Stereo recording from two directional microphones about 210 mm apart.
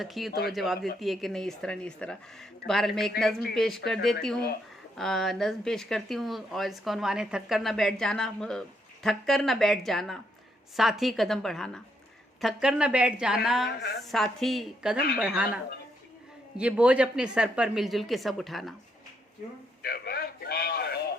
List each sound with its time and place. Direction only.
0.0 s speech: centre (ahead or behind)
0.3 s a woman's voice: 45° left (ahead or behind)
0.5 s speech: centre (ahead or behind)
13.7 s a woman's voice: 50° left (ahead or behind)
14.0 s speech: centre (ahead or behind)
19.8 s a sound: 45° left (ahead or behind)